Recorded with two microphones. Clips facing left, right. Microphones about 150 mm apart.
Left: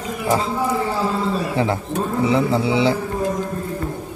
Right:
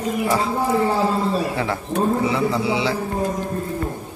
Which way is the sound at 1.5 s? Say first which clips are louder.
Left 2 dB; 30° left (ahead or behind).